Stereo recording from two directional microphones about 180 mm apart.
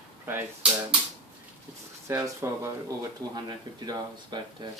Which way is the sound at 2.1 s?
15° right (ahead or behind).